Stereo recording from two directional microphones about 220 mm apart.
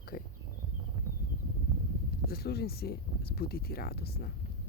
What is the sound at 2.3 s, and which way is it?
Speech, 45° left (ahead or behind).